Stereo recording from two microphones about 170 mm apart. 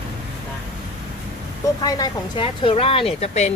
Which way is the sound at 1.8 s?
20° left (ahead or behind).